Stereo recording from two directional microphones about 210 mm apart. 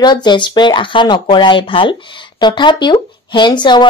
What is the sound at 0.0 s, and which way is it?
A woman's voice, 20° left (ahead or behind).